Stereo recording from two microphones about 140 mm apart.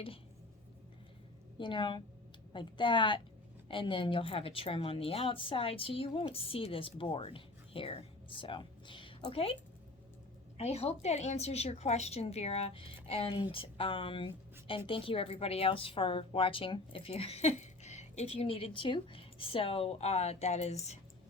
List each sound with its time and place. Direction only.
1.5 s a woman's voice: 35° left (ahead or behind)
10.6 s a woman's voice: 50° left (ahead or behind)